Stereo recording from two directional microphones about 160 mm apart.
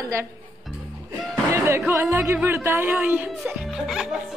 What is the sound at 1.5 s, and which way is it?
Speech, 15° right (ahead or behind).